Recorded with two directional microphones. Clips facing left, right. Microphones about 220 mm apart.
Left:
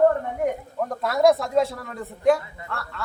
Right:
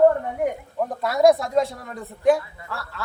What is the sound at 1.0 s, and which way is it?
A woman's voice, centre (ahead or behind).